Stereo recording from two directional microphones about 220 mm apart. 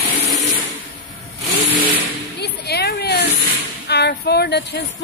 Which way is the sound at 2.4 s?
45° left (ahead or behind).